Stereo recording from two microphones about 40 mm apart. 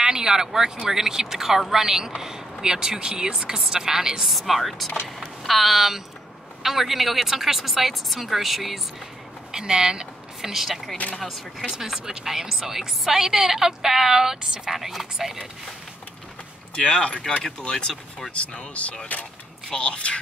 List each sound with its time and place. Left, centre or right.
0.0 s a sound: centre
0.8 s a woman's voice: centre
4.3 s a woman's voice: centre
9.5 s a woman's voice: centre
11.7 s a woman's voice: centre
15.1 s a woman's voice: centre
16.7 s speech: left
19.7 s speech: left